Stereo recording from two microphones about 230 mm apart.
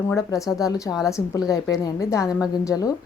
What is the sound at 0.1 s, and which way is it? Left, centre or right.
A woman's voice, centre.